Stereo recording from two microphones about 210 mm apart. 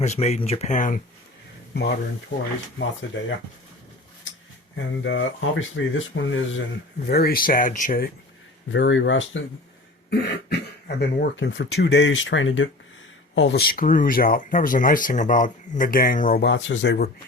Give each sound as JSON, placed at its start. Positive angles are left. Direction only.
{"t": 0.0, "sound": "speech", "side_deg": 30}
{"t": 1.7, "sound": "speech", "side_deg": 50}
{"t": 5.0, "sound": "speech", "side_deg": 60}
{"t": 7.1, "sound": "speech", "side_deg": 45}
{"t": 8.7, "sound": "speech", "side_deg": 60}
{"t": 10.8, "sound": "speech", "side_deg": 50}
{"t": 13.6, "sound": "speech", "side_deg": 45}